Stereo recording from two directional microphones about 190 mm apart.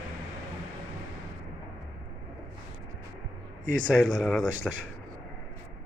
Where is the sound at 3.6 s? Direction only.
45° right (ahead or behind).